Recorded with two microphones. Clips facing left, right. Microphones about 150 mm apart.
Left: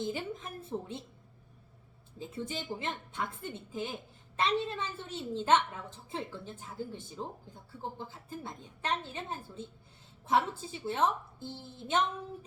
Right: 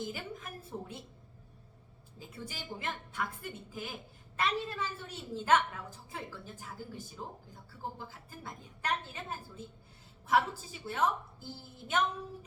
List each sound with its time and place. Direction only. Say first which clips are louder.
0.0 s a woman's voice: left 4 dB; 25° left (ahead or behind)
2.1 s a woman's voice: left 7 dB; 25° left (ahead or behind)